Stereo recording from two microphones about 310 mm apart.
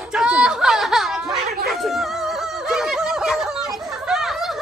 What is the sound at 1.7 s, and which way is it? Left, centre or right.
Music, centre.